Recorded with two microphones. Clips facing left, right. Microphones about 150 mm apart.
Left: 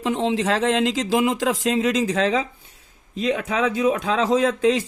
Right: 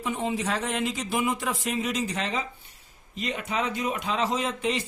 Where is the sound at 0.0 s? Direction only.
90° left.